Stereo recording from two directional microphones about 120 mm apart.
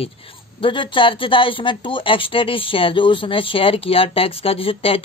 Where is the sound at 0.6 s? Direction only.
45° left (ahead or behind).